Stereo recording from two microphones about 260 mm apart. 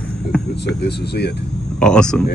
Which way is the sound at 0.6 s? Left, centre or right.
Left.